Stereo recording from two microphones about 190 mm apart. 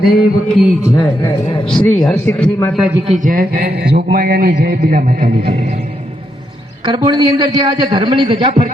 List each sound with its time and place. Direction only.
0.2 s speech: centre (ahead or behind)
0.9 s a man's voice: 15° left (ahead or behind)
1.6 s a man's voice: centre (ahead or behind)
2.7 s speech: 5° right (ahead or behind)
3.1 s a man's voice: 45° right (ahead or behind)
6.8 s a man's voice: 25° right (ahead or behind)